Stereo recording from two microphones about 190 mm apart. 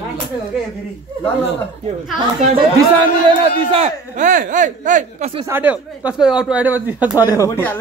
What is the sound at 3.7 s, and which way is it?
Speech, 40° right (ahead or behind).